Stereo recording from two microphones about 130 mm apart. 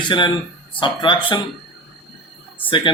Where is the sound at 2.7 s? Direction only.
40° left (ahead or behind).